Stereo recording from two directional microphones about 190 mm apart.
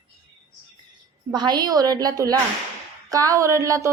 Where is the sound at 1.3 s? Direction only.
20° right (ahead or behind).